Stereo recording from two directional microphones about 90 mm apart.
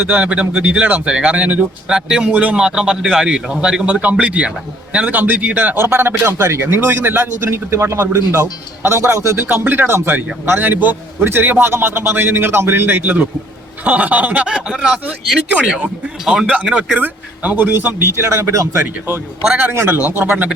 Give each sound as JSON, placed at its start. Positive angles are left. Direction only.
{"t": 0.0, "sound": "a man's voice", "side_deg": -15}
{"t": 19.5, "sound": "a man's voice", "side_deg": -20}
{"t": 19.7, "sound": "a man's voice", "side_deg": -30}